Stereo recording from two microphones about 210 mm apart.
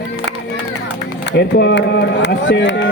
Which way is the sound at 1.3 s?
55° left (ahead or behind).